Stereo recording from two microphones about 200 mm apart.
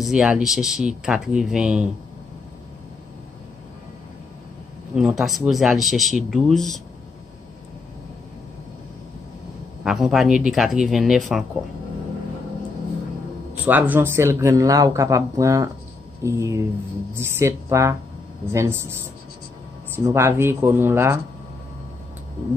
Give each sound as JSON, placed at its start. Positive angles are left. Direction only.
{"t": 0.0, "sound": "speech", "side_deg": -5}
{"t": 4.9, "sound": "speech", "side_deg": 0}
{"t": 9.8, "sound": "speech", "side_deg": 0}
{"t": 13.7, "sound": "speech", "side_deg": -10}
{"t": 20.0, "sound": "speech", "side_deg": -10}